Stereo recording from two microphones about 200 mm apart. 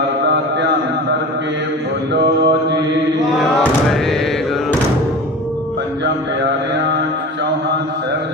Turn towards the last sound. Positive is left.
turn(degrees=-55)  # may be behind; listen again after turning